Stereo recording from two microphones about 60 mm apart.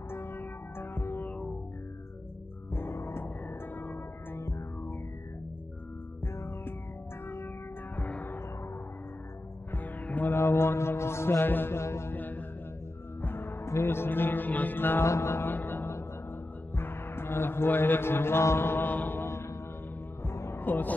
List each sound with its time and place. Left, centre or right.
0.1 s music: left
2.7 s music: left
3.4 s music: left
6.2 s music: left
7.9 s music: left
9.7 s music: left
10.4 s music: left
11.8 s music: left
12.1 s music: left
15.0 s music: left
15.5 s music: left
19.2 s music: left
20.6 s speech: left